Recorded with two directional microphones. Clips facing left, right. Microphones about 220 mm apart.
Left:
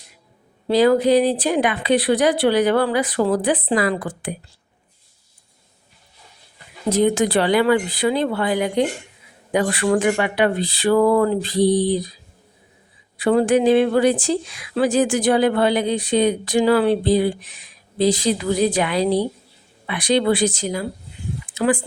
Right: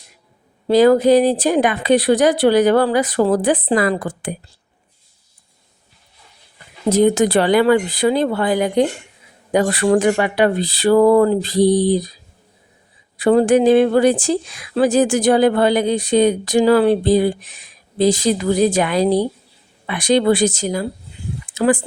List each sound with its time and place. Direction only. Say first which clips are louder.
0.7 s speech: right 4 dB; 45° right (ahead or behind)
6.9 s speech: right 3 dB; 45° right (ahead or behind)
13.1 s speech: right 3 dB; 40° right (ahead or behind)